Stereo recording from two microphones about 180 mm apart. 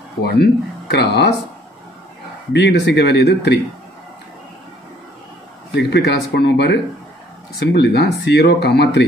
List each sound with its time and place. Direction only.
0.2 s speech: 65° left (ahead or behind)
2.5 s speech: 70° left (ahead or behind)
5.8 s speech: 70° left (ahead or behind)